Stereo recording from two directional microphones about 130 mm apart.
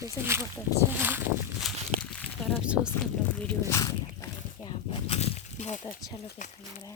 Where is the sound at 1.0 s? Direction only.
15° right (ahead or behind).